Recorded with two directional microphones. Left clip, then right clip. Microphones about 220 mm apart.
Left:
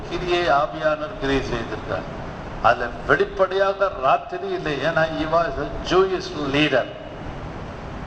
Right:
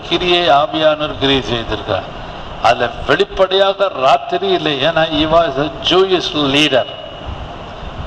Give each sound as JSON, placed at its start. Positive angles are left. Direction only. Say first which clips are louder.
{"t": 0.1, "sound": "a man's voice", "louder": "right 8 dB", "side_deg": -50}